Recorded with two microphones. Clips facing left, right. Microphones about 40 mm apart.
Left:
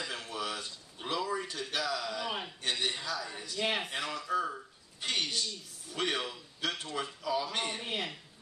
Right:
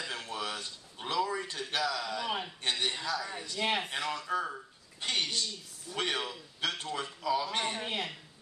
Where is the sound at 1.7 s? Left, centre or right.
Right.